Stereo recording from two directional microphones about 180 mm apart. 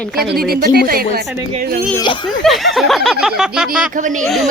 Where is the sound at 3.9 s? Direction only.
45° right (ahead or behind).